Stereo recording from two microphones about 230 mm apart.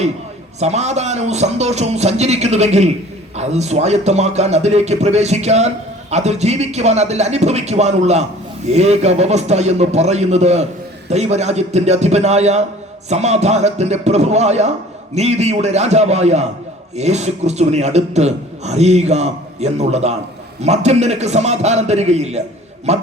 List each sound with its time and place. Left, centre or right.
0.6 s a man's voice: right